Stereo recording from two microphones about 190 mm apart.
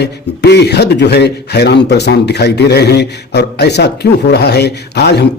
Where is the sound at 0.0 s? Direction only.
60° left (ahead or behind).